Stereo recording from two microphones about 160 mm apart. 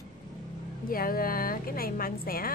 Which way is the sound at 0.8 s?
65° left (ahead or behind).